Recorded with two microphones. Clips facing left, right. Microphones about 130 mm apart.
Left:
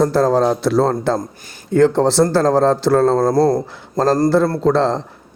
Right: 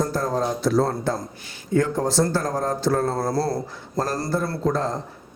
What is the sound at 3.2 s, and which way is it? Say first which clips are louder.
Speech: left 9 dB; 50° left (ahead or behind).